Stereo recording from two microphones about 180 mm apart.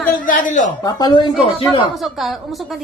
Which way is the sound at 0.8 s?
20° left (ahead or behind).